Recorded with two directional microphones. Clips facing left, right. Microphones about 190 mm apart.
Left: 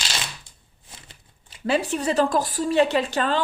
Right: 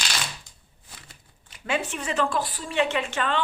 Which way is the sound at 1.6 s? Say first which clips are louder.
Left 6 dB; 35° left (ahead or behind).